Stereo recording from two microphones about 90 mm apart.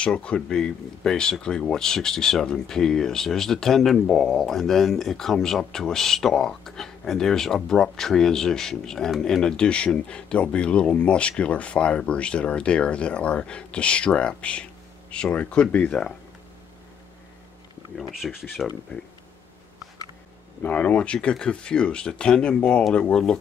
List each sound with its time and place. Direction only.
0.0 s speech: 10° left (ahead or behind)
18.2 s speech: centre (ahead or behind)
20.6 s speech: 15° left (ahead or behind)